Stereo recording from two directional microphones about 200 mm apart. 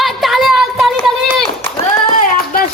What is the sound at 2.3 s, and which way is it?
Music, 45° left (ahead or behind).